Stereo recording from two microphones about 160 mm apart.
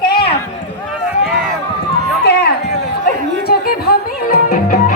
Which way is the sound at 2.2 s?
90° left.